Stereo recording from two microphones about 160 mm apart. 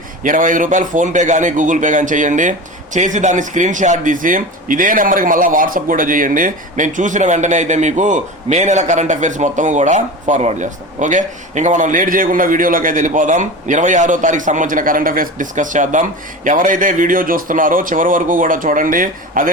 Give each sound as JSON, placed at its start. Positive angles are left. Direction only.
{"t": 0.2, "sound": "a man's voice", "side_deg": -55}